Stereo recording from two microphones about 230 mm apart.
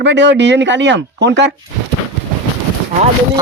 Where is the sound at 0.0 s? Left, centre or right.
Right.